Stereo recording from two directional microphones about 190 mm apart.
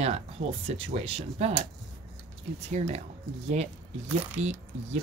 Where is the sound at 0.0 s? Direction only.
35° right (ahead or behind).